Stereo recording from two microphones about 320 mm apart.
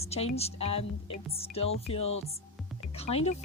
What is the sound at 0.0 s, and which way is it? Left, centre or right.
A woman's voice, centre.